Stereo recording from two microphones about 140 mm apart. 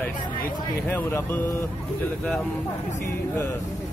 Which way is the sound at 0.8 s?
15° left (ahead or behind).